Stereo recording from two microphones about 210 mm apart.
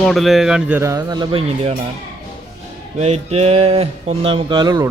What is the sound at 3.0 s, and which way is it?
Speech, 30° right (ahead or behind).